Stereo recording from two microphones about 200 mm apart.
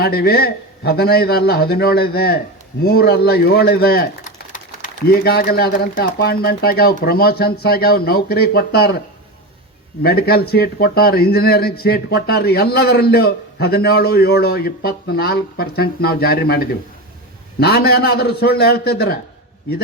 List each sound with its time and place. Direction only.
0.0 s speech: 50° left (ahead or behind)
10.0 s speech: 50° left (ahead or behind)
17.6 s speech: 50° left (ahead or behind)